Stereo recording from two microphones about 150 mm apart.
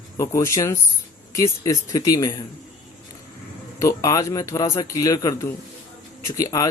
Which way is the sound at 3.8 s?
25° left (ahead or behind).